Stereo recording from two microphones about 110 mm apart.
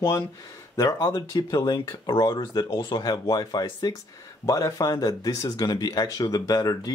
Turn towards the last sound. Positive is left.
turn(degrees=35)  # may be behind; listen again after turning